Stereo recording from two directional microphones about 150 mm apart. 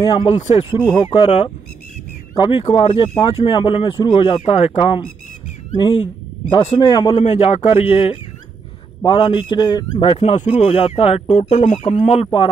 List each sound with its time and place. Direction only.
0.0 s speech: 40° left (ahead or behind)
0.9 s speech: 35° left (ahead or behind)
6.5 s speech: 35° left (ahead or behind)
7.2 s speech: 45° left (ahead or behind)
10.2 s speech: 50° left (ahead or behind)
11.3 s speech: 55° left (ahead or behind)